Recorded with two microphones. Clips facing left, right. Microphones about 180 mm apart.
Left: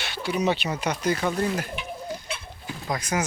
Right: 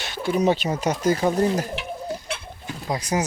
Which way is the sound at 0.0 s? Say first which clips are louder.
Right 4 dB; 45° right (ahead or behind).